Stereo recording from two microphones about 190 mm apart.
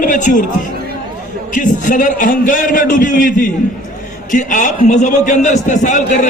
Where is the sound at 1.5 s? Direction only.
40° left (ahead or behind).